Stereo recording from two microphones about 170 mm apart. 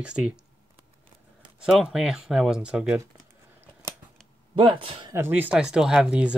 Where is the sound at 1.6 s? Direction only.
Centre (ahead or behind).